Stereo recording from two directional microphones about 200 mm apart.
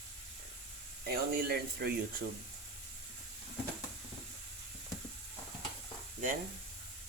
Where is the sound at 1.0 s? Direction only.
50° right (ahead or behind).